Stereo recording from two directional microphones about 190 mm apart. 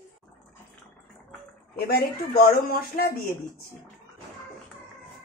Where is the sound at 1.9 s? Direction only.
50° left (ahead or behind).